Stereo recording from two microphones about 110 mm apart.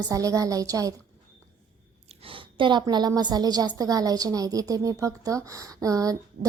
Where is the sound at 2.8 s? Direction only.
35° right (ahead or behind).